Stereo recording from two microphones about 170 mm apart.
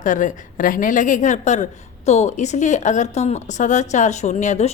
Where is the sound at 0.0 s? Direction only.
50° left (ahead or behind).